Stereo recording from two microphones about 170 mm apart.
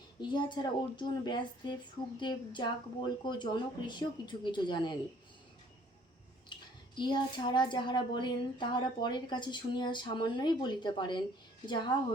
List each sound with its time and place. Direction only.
0.2 s speech: 25° left (ahead or behind)
6.5 s a sound: 25° left (ahead or behind)
6.9 s speech: 25° left (ahead or behind)